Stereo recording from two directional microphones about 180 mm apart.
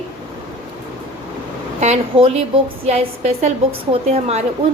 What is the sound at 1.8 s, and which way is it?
A woman's voice, 35° right (ahead or behind).